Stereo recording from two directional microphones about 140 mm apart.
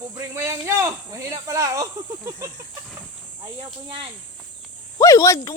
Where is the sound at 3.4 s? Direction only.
35° right (ahead or behind).